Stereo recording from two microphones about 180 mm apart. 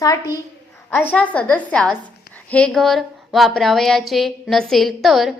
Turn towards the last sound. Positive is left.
turn(degrees=0)  # may be behind; listen again after turning